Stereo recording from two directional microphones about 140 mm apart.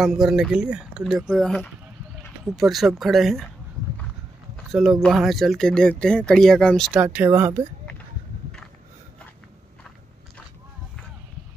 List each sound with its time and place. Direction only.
0.0 s speech: 5° right (ahead or behind)
4.6 s speech: centre (ahead or behind)
6.9 s speech: 10° right (ahead or behind)